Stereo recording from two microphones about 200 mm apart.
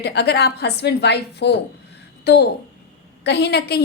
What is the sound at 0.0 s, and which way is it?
A child's voice, 55° left (ahead or behind).